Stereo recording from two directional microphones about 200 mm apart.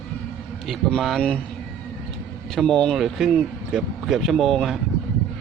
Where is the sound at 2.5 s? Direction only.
Centre (ahead or behind).